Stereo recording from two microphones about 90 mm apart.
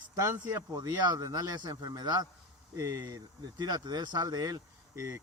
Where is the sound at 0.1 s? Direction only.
45° right (ahead or behind).